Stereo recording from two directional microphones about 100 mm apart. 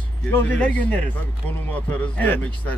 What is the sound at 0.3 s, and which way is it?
Speech, 15° left (ahead or behind).